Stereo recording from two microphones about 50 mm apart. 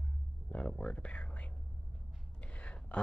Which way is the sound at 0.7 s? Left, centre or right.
Centre.